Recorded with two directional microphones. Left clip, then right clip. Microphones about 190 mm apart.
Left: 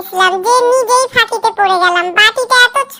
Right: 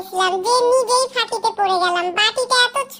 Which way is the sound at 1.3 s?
45° left (ahead or behind).